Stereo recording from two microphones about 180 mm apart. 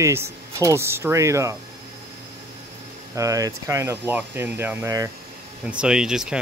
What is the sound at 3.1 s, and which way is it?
Speech, 20° right (ahead or behind).